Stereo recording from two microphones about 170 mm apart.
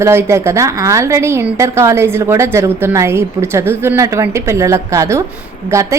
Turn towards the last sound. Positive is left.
turn(degrees=-20)  # may be behind; listen again after turning